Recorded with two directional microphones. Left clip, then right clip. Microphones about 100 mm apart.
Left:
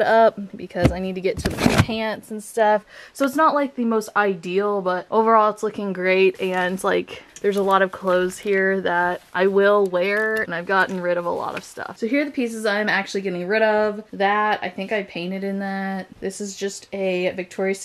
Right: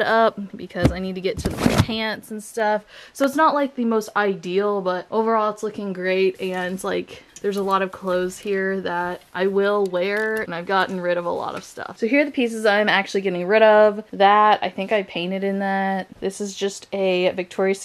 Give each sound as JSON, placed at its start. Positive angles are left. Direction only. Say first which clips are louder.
{"t": 0.0, "sound": "a woman's voice", "louder": "left 2 dB", "side_deg": 15}
{"t": 3.3, "sound": "speech", "louder": "even", "side_deg": -15}
{"t": 5.1, "sound": "a woman's voice", "louder": "left 5 dB", "side_deg": 15}
{"t": 10.0, "sound": "a woman's voice", "louder": "left 2 dB", "side_deg": -15}